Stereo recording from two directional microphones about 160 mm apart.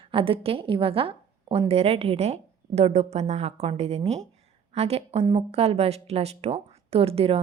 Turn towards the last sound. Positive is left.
turn(degrees=-40)  # may be behind; listen again after turning